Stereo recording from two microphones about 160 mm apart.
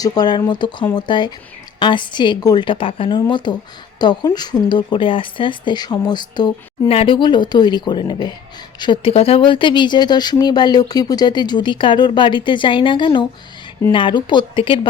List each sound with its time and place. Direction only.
0.0 s a woman's voice: 25° left (ahead or behind)